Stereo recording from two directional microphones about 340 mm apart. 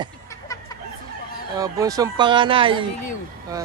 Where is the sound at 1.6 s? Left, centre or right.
Centre.